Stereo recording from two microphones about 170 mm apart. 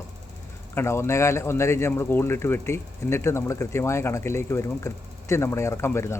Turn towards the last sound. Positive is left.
turn(degrees=15)  # may be behind; listen again after turning